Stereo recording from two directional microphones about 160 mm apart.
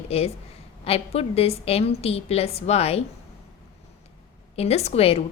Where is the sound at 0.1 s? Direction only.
40° left (ahead or behind).